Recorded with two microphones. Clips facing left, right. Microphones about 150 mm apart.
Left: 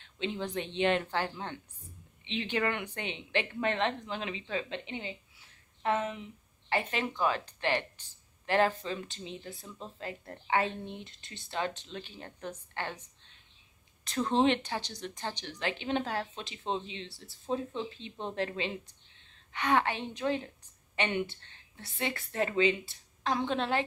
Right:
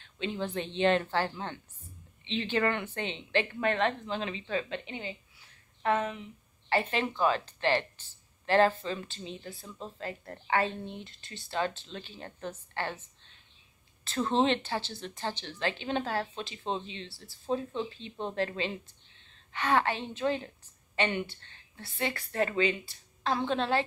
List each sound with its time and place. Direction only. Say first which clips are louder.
0.0 s speech: right 1 dB; 20° left (ahead or behind)
9.5 s speech: right 1 dB; centre (ahead or behind)
9.9 s a woman's voice: right 1 dB; 15° left (ahead or behind)